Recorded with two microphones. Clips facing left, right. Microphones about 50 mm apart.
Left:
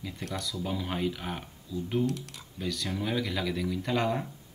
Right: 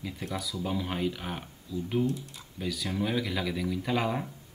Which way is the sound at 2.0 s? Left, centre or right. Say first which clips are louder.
Even; left.